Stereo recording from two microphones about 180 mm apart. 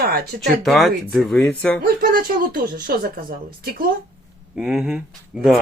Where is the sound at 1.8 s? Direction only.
55° right (ahead or behind).